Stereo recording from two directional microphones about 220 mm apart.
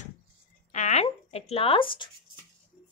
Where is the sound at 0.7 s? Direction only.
30° left (ahead or behind).